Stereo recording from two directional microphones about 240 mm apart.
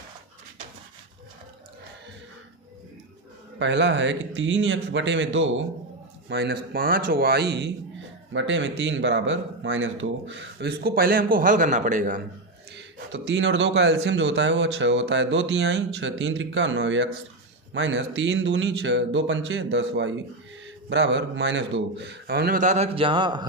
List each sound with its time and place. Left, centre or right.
3.6 s speech: right
6.2 s a man's voice: right
12.7 s a man's voice: right; by 23.5 s centre